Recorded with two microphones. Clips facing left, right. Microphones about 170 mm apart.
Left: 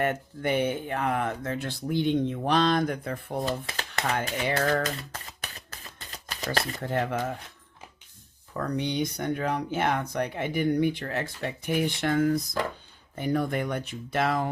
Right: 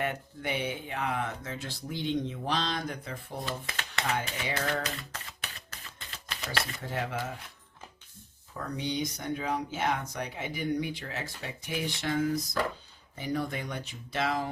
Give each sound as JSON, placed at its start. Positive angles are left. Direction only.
{"t": 0.0, "sound": "speech", "side_deg": 50}
{"t": 3.4, "sound": "speech", "side_deg": 40}
{"t": 4.6, "sound": "typing", "side_deg": 40}
{"t": 6.1, "sound": "shuffling cards", "side_deg": 35}
{"t": 6.8, "sound": "speech", "side_deg": 50}
{"t": 8.7, "sound": "speech", "side_deg": 60}